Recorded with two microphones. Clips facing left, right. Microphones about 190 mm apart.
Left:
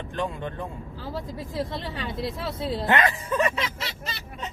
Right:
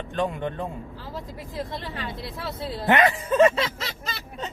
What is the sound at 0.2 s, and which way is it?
Speech, 20° right (ahead or behind).